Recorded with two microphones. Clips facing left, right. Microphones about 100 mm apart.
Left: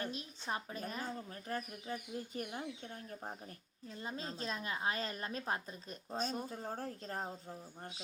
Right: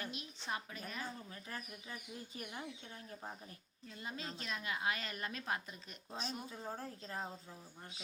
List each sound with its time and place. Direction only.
0.0 s a sound: 35° left (ahead or behind)
0.5 s speech: 35° left (ahead or behind)
3.8 s a woman's voice: 30° left (ahead or behind)
6.1 s speech: 45° left (ahead or behind)